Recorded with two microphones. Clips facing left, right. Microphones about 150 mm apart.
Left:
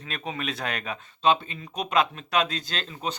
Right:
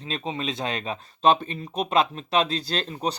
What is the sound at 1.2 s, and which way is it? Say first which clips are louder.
Speech: right 3 dB; 45° right (ahead or behind).